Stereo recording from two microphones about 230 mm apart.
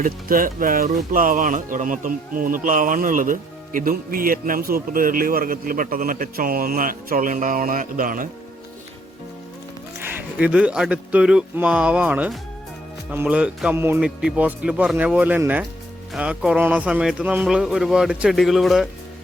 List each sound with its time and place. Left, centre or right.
0.0 s speech: right
10.0 s a man's voice: centre